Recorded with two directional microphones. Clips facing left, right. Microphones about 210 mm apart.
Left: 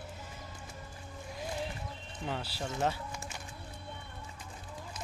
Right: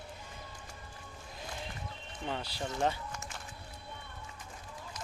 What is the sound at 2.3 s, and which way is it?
Speech, 5° left (ahead or behind).